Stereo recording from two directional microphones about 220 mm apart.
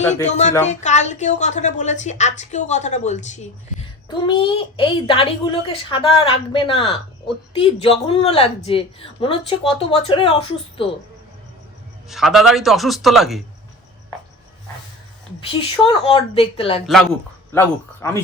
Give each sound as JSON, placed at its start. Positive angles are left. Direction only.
{"t": 0.0, "sound": "speech", "side_deg": 30}
{"t": 4.1, "sound": "a child's voice", "side_deg": 20}
{"t": 12.0, "sound": "a man's voice", "side_deg": 0}
{"t": 15.4, "sound": "a child's voice", "side_deg": 25}
{"t": 16.8, "sound": "a man's voice", "side_deg": 0}